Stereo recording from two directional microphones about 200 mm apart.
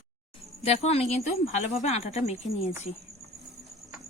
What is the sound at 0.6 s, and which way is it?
Speech, 30° left (ahead or behind).